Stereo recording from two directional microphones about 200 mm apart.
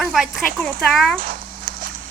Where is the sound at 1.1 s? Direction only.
45° right (ahead or behind).